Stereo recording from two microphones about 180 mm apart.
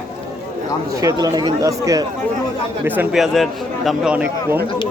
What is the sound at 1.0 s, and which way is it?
Speech, 20° right (ahead or behind).